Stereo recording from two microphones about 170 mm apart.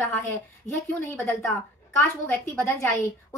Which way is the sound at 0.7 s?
10° left (ahead or behind).